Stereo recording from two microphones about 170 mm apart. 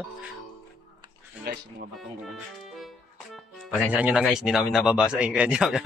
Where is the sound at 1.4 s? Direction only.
65° right (ahead or behind).